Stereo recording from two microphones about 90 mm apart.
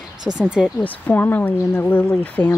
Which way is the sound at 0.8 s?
20° left (ahead or behind).